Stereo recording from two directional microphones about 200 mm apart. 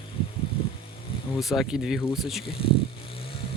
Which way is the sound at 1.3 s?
Centre (ahead or behind).